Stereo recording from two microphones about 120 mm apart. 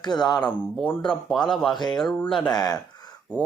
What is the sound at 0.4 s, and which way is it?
Speech, 10° left (ahead or behind).